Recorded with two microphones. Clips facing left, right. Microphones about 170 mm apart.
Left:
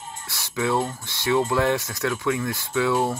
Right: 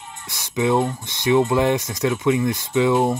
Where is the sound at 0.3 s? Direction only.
20° right (ahead or behind).